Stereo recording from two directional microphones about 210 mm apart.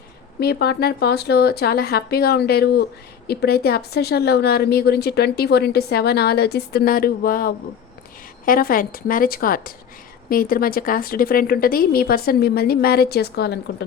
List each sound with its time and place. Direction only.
0.3 s a woman's voice: 50° left (ahead or behind)